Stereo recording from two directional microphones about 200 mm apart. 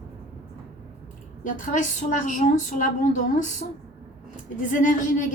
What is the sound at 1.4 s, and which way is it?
A woman's voice, 40° left (ahead or behind).